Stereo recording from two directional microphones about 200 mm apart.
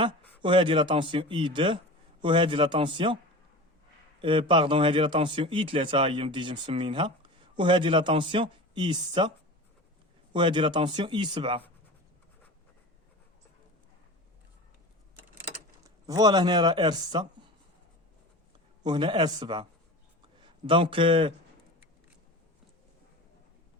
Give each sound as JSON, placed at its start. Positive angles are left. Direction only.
{"t": 0.4, "sound": "speech", "side_deg": -25}
{"t": 4.2, "sound": "speech", "side_deg": -25}
{"t": 10.3, "sound": "speech", "side_deg": -25}
{"t": 15.8, "sound": "speech", "side_deg": -20}
{"t": 18.8, "sound": "a man's voice", "side_deg": -20}